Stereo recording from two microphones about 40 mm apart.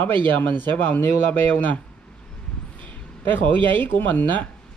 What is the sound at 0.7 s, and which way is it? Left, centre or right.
Speech, left.